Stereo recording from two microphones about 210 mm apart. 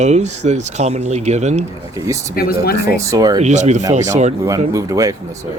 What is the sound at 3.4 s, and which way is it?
Speech, 35° right (ahead or behind).